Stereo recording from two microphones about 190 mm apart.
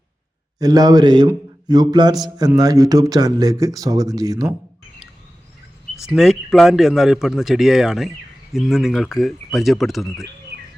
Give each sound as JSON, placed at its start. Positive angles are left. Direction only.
{"t": 0.6, "sound": "speech", "side_deg": -20}
{"t": 6.0, "sound": "speech", "side_deg": 0}